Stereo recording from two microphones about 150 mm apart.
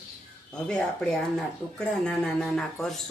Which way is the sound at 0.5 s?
5° left (ahead or behind).